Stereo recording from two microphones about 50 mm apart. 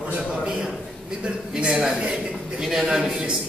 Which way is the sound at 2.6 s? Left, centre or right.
Centre.